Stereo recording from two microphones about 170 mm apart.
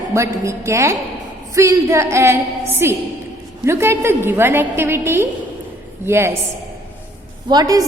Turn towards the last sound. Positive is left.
turn(degrees=-20)  # may be behind; listen again after turning